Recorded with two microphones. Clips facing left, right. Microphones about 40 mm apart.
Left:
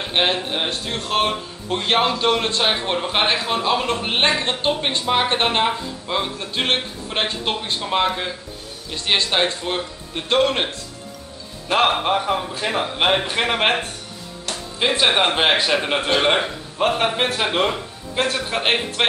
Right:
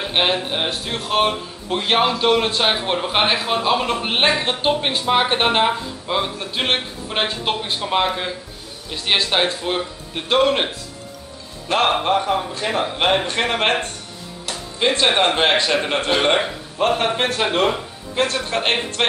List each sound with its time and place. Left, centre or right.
0.0 s speech: centre
11.7 s speech: centre